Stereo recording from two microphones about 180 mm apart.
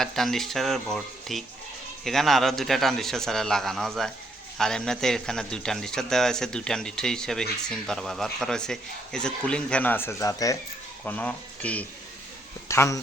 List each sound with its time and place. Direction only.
0.0 s speech: centre (ahead or behind)